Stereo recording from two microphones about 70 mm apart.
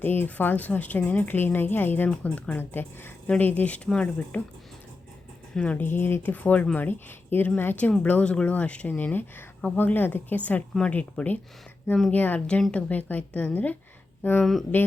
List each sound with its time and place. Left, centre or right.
0.0 s speech: left
5.5 s speech: centre
5.8 s speech: left